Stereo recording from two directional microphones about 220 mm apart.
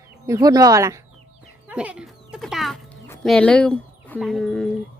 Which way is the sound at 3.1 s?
5° left (ahead or behind).